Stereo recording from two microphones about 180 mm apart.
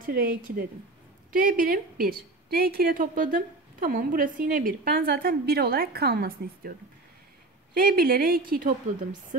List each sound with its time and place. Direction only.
0.0 s a woman's voice: 55° right (ahead or behind)
7.7 s speech: 55° right (ahead or behind)